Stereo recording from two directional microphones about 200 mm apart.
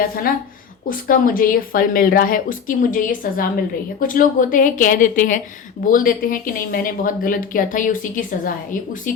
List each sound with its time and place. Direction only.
0.9 s speech: 45° left (ahead or behind)